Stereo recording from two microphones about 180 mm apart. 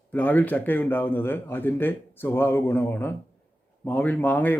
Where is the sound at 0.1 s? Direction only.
10° left (ahead or behind).